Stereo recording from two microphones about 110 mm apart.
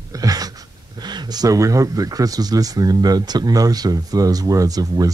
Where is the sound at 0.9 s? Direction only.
40° right (ahead or behind).